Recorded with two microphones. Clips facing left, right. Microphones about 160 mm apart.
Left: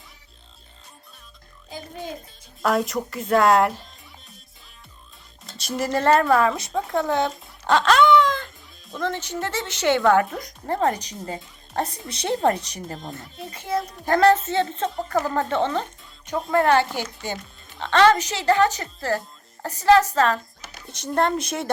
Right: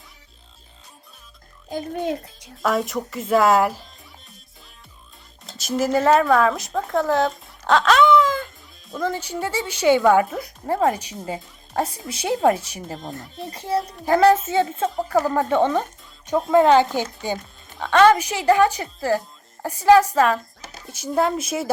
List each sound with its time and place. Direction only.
1.7 s a child's voice: 60° right (ahead or behind)
2.6 s speech: centre (ahead or behind)
5.5 s speech: centre (ahead or behind)
13.5 s a child's voice: 35° right (ahead or behind)
13.9 s speech: 5° right (ahead or behind)
16.3 s speech: centre (ahead or behind)
16.6 s speech: 15° right (ahead or behind)